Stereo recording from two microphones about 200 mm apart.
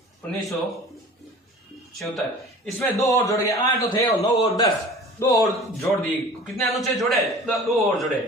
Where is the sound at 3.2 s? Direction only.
15° left (ahead or behind).